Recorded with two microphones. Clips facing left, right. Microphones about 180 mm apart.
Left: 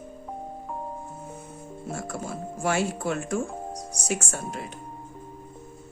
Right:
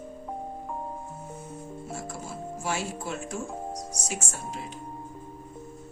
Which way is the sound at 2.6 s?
60° left (ahead or behind).